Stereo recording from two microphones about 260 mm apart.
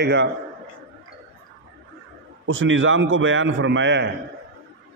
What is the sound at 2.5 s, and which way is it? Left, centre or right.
A man's voice, right.